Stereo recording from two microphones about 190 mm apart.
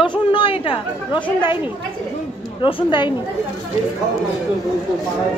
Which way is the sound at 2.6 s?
25° left (ahead or behind).